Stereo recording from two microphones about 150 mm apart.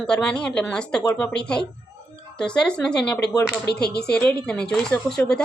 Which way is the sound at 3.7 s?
90° left.